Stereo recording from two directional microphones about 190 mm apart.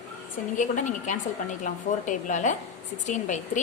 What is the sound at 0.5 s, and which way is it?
A woman's voice, 40° left (ahead or behind).